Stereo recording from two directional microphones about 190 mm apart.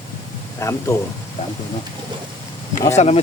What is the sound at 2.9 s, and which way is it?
Speech, 35° left (ahead or behind).